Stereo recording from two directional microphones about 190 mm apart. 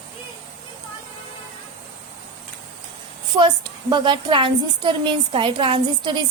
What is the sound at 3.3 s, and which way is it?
A woman's voice, 25° right (ahead or behind).